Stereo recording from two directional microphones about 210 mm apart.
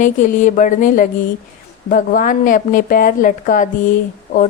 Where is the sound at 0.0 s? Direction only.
35° left (ahead or behind).